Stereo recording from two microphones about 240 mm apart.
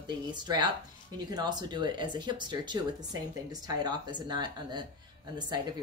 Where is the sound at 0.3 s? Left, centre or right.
Centre.